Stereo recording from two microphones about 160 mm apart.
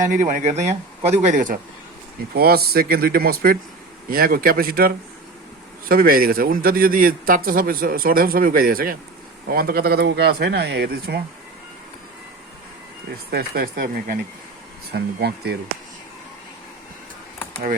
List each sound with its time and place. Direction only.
0.1 s speech: 50° right (ahead or behind)
2.3 s a man's voice: 75° right (ahead or behind)
13.3 s speech: 70° right (ahead or behind)
14.9 s speech: 90° right